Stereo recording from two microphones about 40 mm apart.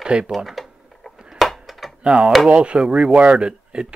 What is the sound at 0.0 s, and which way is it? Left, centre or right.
Speech, right.